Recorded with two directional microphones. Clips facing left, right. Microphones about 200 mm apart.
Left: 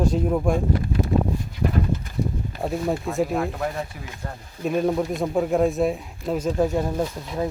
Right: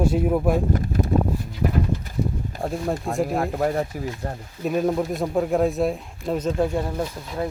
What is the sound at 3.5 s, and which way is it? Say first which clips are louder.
Speech: right 5 dB; 45° right (ahead or behind).